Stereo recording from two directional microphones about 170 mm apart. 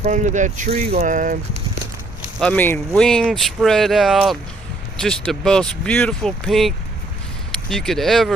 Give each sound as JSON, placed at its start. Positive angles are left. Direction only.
{"t": 0.0, "sound": "speech", "side_deg": -45}
{"t": 2.4, "sound": "speech", "side_deg": 10}